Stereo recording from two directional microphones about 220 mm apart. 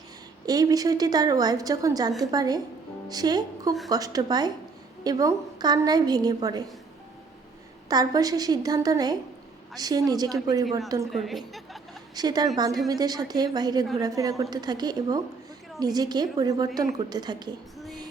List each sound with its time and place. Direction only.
0.4 s a woman's voice: 15° right (ahead or behind)
7.9 s a woman's voice: 15° right (ahead or behind)
11.1 s a woman's voice: centre (ahead or behind)
12.1 s a woman's voice: 20° right (ahead or behind)